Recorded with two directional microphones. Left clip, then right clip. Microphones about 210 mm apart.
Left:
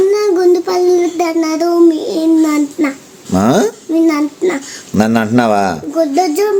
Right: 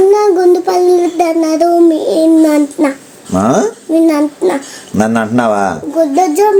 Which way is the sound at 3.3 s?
25° left (ahead or behind).